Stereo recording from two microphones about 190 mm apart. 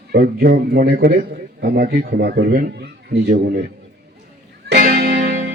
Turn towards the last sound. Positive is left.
turn(degrees=-45)  # may be behind; listen again after turning